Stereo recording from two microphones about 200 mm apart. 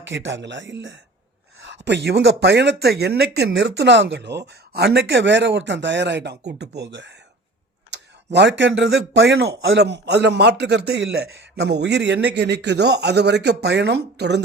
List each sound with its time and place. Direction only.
0.0 s speech: 65° right (ahead or behind)